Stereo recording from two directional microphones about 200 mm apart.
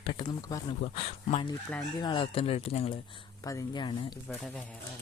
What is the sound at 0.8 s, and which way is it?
Speech, 30° left (ahead or behind).